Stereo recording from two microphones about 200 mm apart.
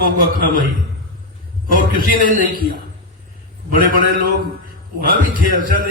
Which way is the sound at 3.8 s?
45° right (ahead or behind).